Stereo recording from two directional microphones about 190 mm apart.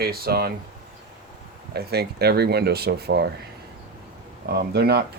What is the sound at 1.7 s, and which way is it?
Speech, 55° right (ahead or behind).